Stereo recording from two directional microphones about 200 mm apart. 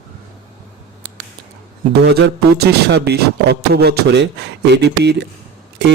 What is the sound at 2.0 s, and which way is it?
Speech, 55° right (ahead or behind).